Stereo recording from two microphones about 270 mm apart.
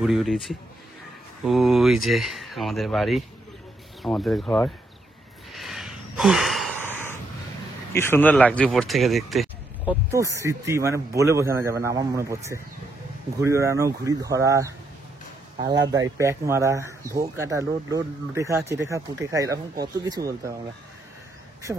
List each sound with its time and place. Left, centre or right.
0.0 s speech: centre
5.5 s gasp: centre
7.9 s speech: centre
10.1 s speech: centre